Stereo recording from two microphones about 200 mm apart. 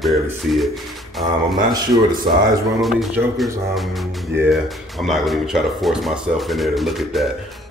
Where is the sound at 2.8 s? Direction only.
Centre (ahead or behind).